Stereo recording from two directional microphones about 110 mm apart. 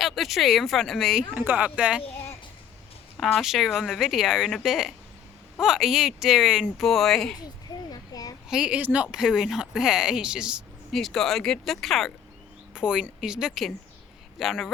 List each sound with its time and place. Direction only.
0.0 s speech: centre (ahead or behind)
1.3 s speech: 10° right (ahead or behind)
3.3 s speech: centre (ahead or behind)
7.9 s a sound: 35° left (ahead or behind)
8.4 s speech: 5° right (ahead or behind)
10.9 s speech: 5° left (ahead or behind)